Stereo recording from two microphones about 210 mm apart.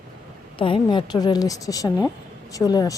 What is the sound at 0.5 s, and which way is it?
A woman's voice, 25° left (ahead or behind).